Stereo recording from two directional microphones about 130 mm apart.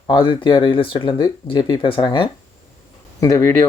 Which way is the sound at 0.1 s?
40° left (ahead or behind).